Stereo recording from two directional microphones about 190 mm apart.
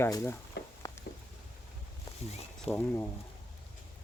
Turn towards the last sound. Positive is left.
turn(degrees=10)  # may be behind; listen again after turning